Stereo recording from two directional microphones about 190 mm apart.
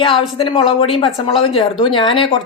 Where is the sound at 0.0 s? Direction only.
30° left (ahead or behind).